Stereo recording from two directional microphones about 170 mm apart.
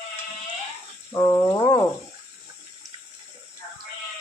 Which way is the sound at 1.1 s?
20° left (ahead or behind).